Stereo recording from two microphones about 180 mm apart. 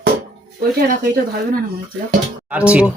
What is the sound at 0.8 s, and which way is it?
Speech, 55° right (ahead or behind).